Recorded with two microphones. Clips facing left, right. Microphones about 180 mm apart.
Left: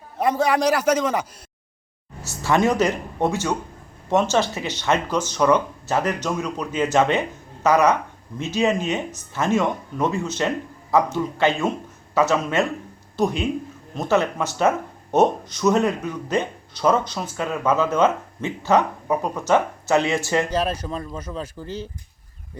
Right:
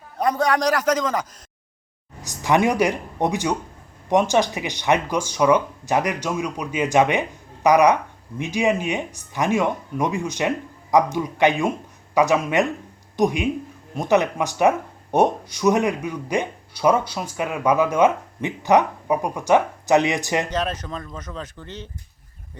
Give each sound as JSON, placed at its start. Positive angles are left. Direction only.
{"t": 0.2, "sound": "a man's voice", "side_deg": 5}
{"t": 2.2, "sound": "speech", "side_deg": -15}
{"t": 20.5, "sound": "a man's voice", "side_deg": 10}